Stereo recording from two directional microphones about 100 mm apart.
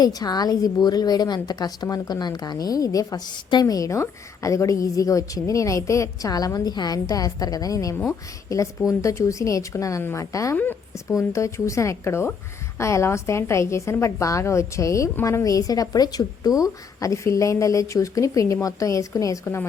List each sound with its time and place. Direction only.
0.0 s a woman's voice: 40° left (ahead or behind)